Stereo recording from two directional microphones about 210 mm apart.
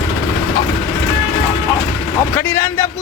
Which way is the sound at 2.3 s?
10° left (ahead or behind).